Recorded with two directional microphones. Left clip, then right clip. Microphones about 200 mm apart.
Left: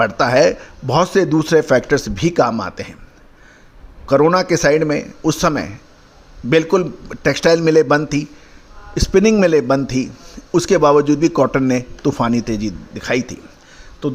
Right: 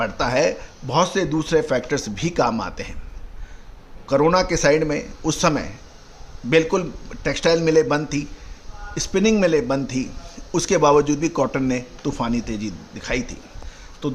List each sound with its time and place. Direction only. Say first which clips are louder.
0.0 s a man's voice: left 7 dB; 30° left (ahead or behind)
4.0 s a man's voice: left 4 dB; 25° left (ahead or behind)